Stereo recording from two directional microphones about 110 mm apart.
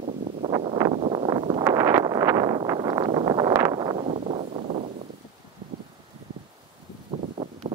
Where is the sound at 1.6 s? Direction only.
25° right (ahead or behind).